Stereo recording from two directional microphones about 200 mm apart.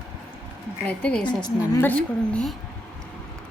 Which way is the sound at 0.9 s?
5° left (ahead or behind).